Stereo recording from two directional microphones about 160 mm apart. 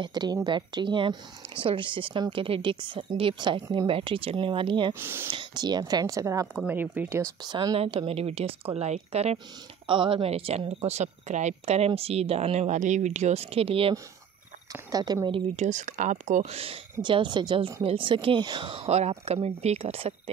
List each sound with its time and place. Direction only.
0.0 s speech: 25° right (ahead or behind)
4.9 s speech: 15° right (ahead or behind)
5.3 s a woman's voice: 25° right (ahead or behind)
6.4 s speech: 10° right (ahead or behind)
7.4 s speech: 30° right (ahead or behind)
14.7 s a woman's voice: 25° right (ahead or behind)
15.5 s speech: 45° right (ahead or behind)